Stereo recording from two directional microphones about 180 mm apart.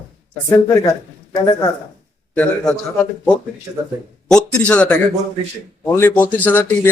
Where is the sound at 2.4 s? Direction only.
10° left (ahead or behind).